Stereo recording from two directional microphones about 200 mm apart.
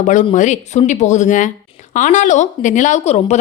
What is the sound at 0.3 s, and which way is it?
A woman's voice, 35° left (ahead or behind).